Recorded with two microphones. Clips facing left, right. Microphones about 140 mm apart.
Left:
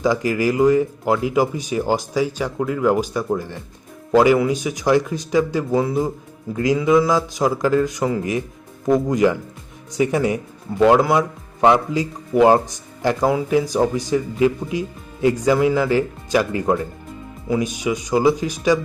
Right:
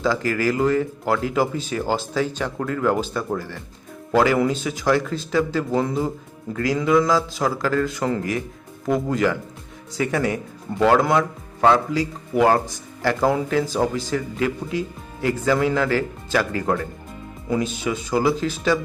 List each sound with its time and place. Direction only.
0.0 s speech: 15° left (ahead or behind)